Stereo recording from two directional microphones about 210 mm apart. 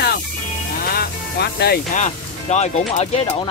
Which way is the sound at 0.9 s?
50° left (ahead or behind).